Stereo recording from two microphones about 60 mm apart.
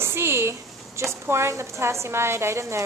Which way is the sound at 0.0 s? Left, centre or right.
Right.